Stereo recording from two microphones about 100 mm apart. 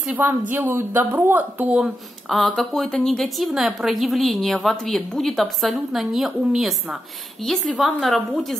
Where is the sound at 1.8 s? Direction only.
Centre (ahead or behind).